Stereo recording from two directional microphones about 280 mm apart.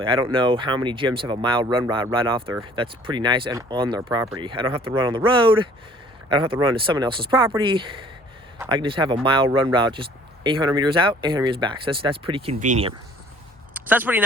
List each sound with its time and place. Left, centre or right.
0.0 s speech: centre
13.7 s speech: centre